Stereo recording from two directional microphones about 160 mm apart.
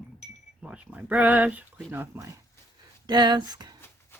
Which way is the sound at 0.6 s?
5° right (ahead or behind).